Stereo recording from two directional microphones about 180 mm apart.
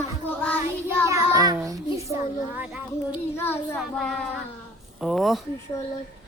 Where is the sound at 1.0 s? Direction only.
20° right (ahead or behind).